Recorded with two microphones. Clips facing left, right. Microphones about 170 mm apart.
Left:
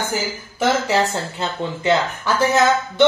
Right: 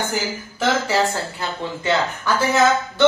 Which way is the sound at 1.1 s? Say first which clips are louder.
Left 2 dB; 20° left (ahead or behind).